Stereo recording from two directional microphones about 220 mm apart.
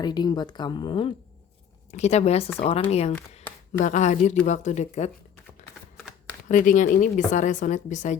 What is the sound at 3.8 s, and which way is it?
A woman's voice, 35° left (ahead or behind).